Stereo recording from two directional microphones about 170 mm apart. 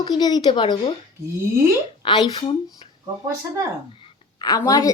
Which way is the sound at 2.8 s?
30° left (ahead or behind).